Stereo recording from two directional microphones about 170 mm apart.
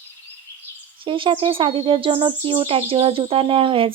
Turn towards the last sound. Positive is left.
turn(degrees=-30)  # may be behind; listen again after turning